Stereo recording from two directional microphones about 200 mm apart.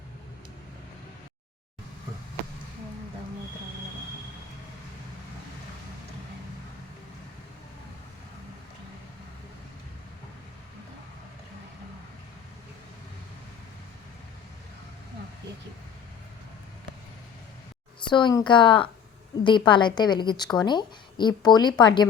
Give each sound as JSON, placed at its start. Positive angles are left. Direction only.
{"t": 18.0, "sound": "speech", "side_deg": 25}